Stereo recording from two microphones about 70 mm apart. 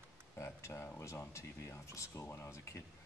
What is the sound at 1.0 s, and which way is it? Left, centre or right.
Speech, left.